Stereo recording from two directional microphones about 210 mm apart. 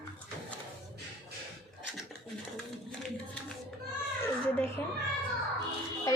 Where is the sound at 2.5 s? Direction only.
5° left (ahead or behind).